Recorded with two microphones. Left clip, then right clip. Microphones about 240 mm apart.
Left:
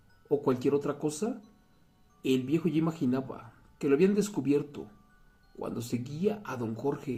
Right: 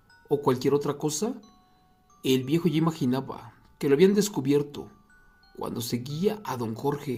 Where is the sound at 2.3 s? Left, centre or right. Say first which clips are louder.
Right 3 dB; right.